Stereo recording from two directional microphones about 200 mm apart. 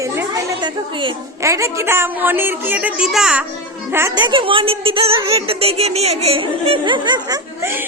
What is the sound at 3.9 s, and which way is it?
A woman's voice, 15° right (ahead or behind).